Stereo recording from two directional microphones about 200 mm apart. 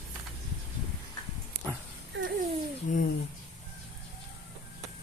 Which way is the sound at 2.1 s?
65° right (ahead or behind).